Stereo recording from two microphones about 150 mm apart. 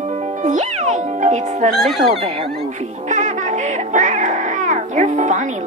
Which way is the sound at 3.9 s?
55° right (ahead or behind).